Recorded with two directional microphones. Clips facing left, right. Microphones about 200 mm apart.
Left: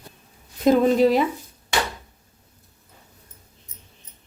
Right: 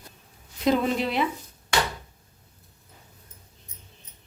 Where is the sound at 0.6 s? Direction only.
40° left (ahead or behind).